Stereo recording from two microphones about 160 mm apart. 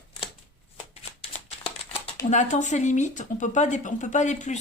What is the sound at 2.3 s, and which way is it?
Speech, 50° left (ahead or behind).